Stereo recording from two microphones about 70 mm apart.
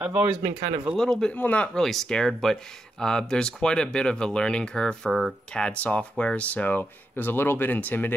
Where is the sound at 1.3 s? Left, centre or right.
Left.